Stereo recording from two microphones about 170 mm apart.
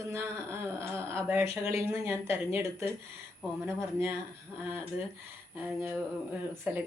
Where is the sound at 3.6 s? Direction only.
15° right (ahead or behind).